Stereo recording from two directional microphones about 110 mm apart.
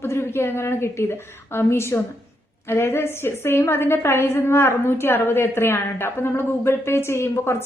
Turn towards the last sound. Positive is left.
turn(degrees=25)  # may be behind; listen again after turning